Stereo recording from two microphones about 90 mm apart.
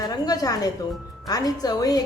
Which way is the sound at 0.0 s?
45° left (ahead or behind).